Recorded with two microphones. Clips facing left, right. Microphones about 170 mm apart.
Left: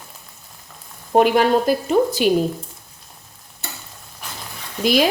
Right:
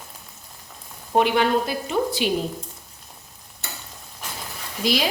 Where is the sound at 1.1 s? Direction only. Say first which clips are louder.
Left 4 dB; 45° left (ahead or behind).